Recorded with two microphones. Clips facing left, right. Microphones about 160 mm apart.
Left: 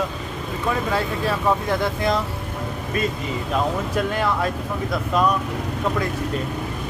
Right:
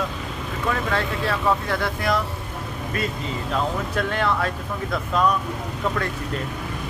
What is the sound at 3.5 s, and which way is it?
Speech, 15° left (ahead or behind).